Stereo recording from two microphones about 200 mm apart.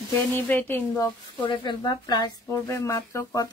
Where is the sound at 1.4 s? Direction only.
25° left (ahead or behind).